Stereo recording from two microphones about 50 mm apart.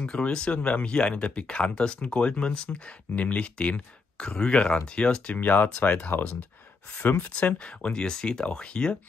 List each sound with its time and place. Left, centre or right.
0.1 s speech: centre
5.3 s speech: left
7.0 s speech: left
7.2 s speech: left